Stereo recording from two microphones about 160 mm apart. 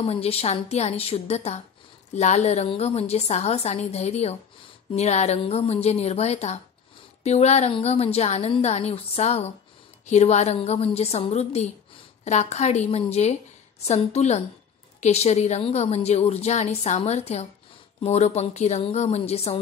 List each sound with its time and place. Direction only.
0.0 s a woman's voice: 40° left (ahead or behind)